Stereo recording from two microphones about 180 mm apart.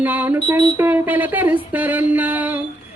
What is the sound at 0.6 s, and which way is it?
Speech, 20° right (ahead or behind).